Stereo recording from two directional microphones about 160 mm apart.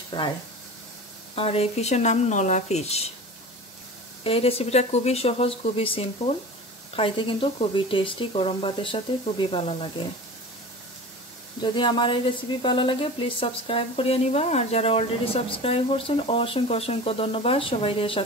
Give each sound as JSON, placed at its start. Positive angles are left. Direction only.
{"t": 0.1, "sound": "speech", "side_deg": 30}
{"t": 1.3, "sound": "speech", "side_deg": 35}
{"t": 4.2, "sound": "speech", "side_deg": 35}
{"t": 11.6, "sound": "speech", "side_deg": 30}